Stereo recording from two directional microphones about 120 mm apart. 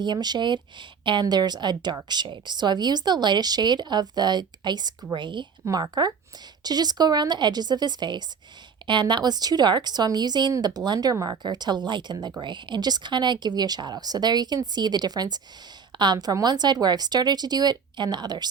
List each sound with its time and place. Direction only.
0.0 s speech: 35° right (ahead or behind)